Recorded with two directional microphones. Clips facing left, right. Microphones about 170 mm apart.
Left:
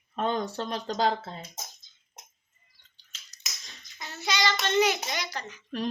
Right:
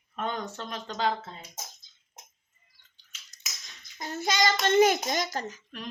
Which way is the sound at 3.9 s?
50° right (ahead or behind).